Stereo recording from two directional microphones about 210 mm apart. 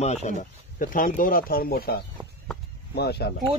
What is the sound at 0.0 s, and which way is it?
Speech, 30° left (ahead or behind).